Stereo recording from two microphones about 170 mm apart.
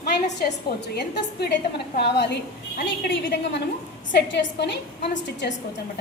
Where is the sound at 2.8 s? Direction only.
90° left.